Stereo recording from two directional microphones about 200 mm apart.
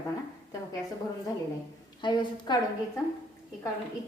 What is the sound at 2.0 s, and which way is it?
Speech, 20° left (ahead or behind).